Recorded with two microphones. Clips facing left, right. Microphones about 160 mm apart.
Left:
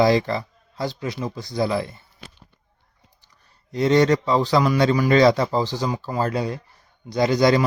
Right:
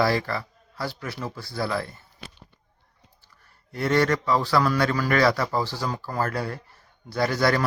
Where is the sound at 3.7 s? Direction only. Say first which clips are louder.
Left 5 dB; 20° left (ahead or behind).